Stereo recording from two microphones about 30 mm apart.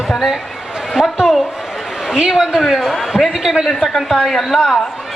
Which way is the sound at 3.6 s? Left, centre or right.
Centre.